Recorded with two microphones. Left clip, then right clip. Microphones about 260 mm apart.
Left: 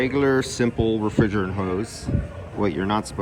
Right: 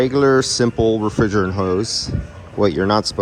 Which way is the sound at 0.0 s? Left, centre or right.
Centre.